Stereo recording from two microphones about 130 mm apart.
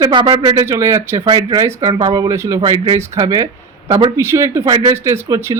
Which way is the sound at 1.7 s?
20° right (ahead or behind).